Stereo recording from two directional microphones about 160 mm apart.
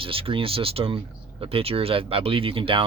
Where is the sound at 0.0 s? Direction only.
35° right (ahead or behind).